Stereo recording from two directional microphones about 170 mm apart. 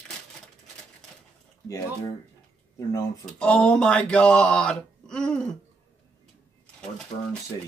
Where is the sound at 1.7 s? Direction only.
20° left (ahead or behind).